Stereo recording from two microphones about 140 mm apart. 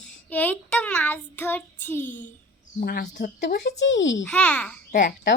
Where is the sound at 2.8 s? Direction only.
80° left.